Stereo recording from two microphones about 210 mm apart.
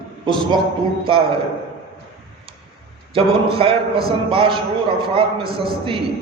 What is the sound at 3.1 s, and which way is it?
A man's voice, 25° right (ahead or behind).